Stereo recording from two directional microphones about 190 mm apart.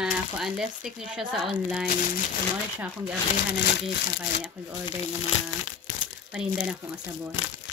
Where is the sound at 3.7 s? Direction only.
65° left (ahead or behind).